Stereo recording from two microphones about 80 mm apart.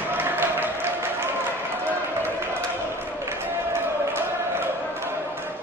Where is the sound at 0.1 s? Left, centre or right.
Right.